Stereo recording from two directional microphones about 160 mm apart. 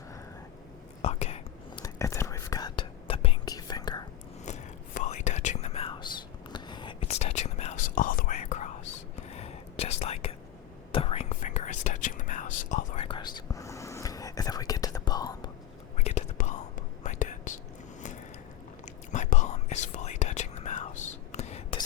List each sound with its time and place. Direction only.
1.0 s whispering: 40° left (ahead or behind)
1.8 s whispering: 20° left (ahead or behind); by 3.3 s 35° left (ahead or behind)
3.4 s whispering: 25° left (ahead or behind)
4.4 s whispering: 45° left (ahead or behind); by 7.1 s 30° left (ahead or behind)
7.1 s whispering: 40° left (ahead or behind)
13.1 s whispering: 25° left (ahead or behind)
16.0 s whispering: 45° left (ahead or behind)
18.9 s whispering: 50° left (ahead or behind)